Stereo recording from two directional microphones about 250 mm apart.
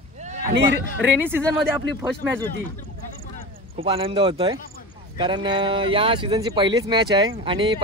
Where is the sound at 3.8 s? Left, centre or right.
Right.